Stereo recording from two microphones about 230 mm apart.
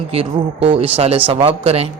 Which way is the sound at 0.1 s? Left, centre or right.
Right.